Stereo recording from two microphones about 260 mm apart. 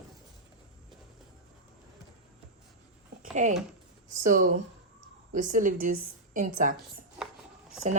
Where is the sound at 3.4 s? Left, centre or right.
Right.